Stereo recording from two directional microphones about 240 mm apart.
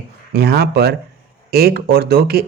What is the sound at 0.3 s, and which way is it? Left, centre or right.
Speech, right.